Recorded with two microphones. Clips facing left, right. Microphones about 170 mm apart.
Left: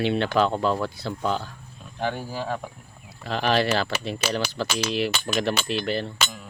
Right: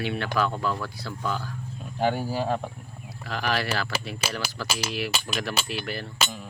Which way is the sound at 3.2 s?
25° left (ahead or behind).